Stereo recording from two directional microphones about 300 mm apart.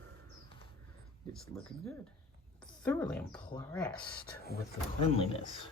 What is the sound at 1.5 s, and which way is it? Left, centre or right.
Speech, centre.